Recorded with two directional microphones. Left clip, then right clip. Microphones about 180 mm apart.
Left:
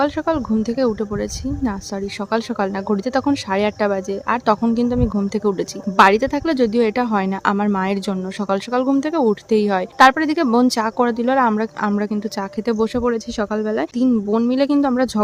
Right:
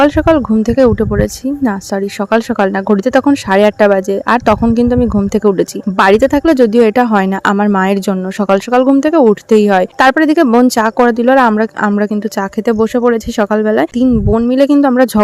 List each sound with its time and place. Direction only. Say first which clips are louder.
0.0 s speech: right 10 dB; 40° right (ahead or behind)